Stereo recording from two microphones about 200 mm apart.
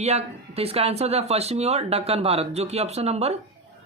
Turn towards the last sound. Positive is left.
turn(degrees=-30)  # may be behind; listen again after turning